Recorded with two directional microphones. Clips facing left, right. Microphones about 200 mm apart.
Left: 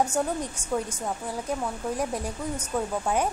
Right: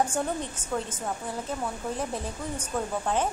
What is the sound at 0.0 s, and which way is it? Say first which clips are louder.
A woman's voice: left 2 dB; 10° left (ahead or behind).